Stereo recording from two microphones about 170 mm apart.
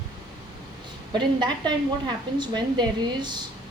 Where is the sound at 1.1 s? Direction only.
25° right (ahead or behind).